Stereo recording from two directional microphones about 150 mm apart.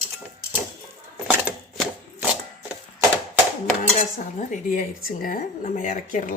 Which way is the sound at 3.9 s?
55° left (ahead or behind).